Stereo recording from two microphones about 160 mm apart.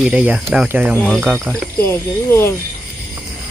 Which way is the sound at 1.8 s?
15° left (ahead or behind).